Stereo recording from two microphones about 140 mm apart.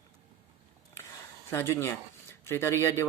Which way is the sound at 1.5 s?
20° left (ahead or behind).